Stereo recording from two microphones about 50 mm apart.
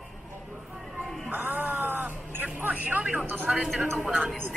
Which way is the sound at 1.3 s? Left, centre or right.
Right.